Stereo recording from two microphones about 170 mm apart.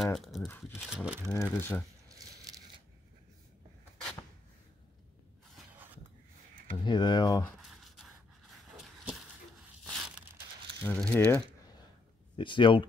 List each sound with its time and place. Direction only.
0.0 s speech: centre (ahead or behind)
1.5 s speech: 10° left (ahead or behind)
2.0 s a sound: 20° right (ahead or behind)
6.7 s speech: 25° left (ahead or behind)
7.6 s pant: centre (ahead or behind)
9.9 s a sound: 5° right (ahead or behind)
10.8 s speech: 5° left (ahead or behind)
12.4 s speech: 30° left (ahead or behind)